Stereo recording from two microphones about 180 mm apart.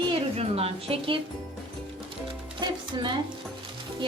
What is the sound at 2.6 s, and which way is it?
Music, 25° right (ahead or behind).